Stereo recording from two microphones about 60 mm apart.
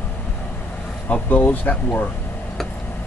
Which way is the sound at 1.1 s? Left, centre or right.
Left.